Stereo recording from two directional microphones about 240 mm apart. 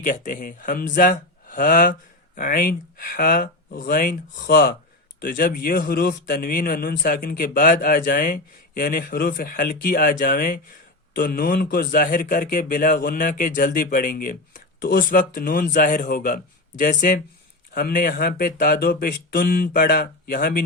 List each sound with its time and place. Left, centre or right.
0.0 s speech: left